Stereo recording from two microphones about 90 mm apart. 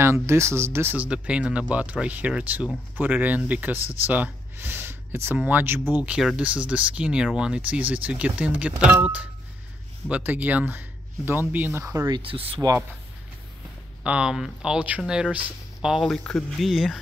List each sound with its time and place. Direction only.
0.0 s speech: 30° right (ahead or behind)
0.9 s speech: 15° right (ahead or behind)
6.0 s speech: 10° right (ahead or behind)
11.8 s speech: 35° right (ahead or behind)
12.2 s speech: 90° right
14.0 s speech: 10° right (ahead or behind)
16.1 s speech: 10° left (ahead or behind)
16.5 s speech: centre (ahead or behind)